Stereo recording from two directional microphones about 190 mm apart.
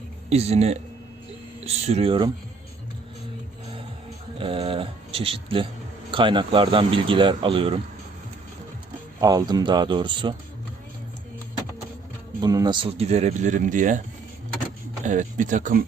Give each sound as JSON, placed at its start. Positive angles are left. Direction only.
{"t": 0.3, "sound": "speech", "side_deg": -35}
{"t": 4.4, "sound": "speech", "side_deg": -30}
{"t": 9.2, "sound": "speech", "side_deg": -20}
{"t": 12.4, "sound": "speech", "side_deg": -20}
{"t": 15.0, "sound": "speech", "side_deg": -40}